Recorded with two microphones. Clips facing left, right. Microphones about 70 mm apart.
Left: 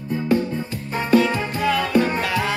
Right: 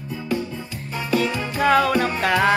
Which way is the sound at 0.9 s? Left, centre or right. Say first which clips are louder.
Left 5 dB; left.